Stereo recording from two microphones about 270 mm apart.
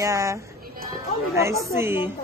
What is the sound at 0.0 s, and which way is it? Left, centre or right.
Speech, centre.